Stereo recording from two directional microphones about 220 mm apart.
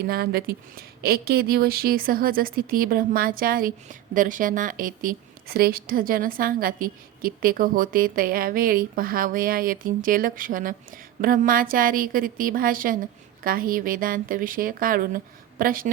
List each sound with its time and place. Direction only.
0.0 s speech: 45° right (ahead or behind)